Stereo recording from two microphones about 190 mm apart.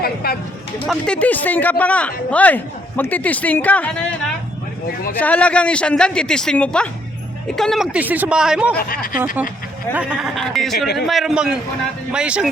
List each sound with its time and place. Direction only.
0.0 s a sound: 55° left (ahead or behind)
0.9 s speech: 5° left (ahead or behind)
9.9 s speech: 5° right (ahead or behind)